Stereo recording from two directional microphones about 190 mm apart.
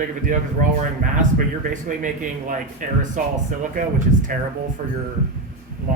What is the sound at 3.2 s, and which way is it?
Speech, 45° right (ahead or behind).